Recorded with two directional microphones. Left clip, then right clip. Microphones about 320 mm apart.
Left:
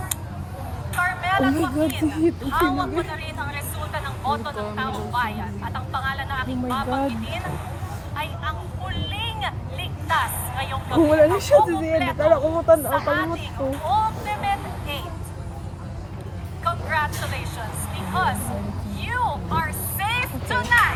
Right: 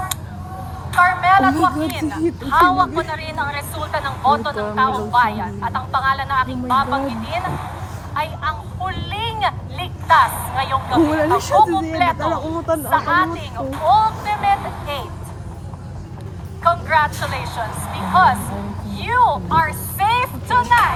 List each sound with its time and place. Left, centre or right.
0.9 s a woman's voice: right
8.1 s vehicle: right
11.9 s a woman's voice: right
12.3 s speech: centre
12.9 s a woman's voice: right
13.7 s vehicle: right
16.6 s vehicle: right